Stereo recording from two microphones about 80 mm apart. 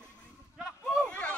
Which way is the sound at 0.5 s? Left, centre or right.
Centre.